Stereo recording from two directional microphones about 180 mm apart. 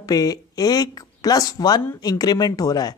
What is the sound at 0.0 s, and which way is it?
Speech, 20° left (ahead or behind).